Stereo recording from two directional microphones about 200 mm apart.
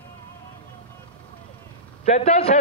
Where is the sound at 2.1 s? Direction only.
35° left (ahead or behind).